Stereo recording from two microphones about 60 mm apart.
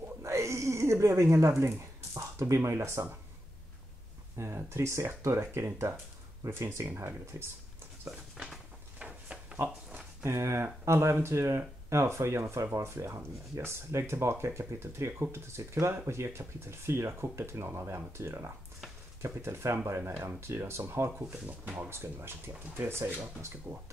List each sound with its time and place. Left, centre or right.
0.2 s cat: right
2.1 s a sound: right
2.8 s speech: right
4.6 s speech: right
9.0 s drawer open or close: centre
10.2 s speech: right
21.5 s speech: right